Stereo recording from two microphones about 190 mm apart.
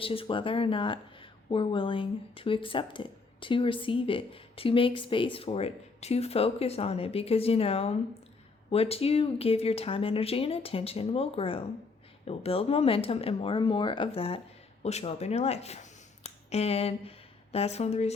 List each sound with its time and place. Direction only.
0.0 s speech: 30° left (ahead or behind)